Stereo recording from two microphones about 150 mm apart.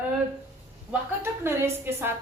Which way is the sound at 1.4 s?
15° right (ahead or behind).